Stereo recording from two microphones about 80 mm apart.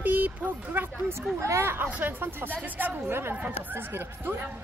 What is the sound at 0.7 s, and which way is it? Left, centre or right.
Speech, right.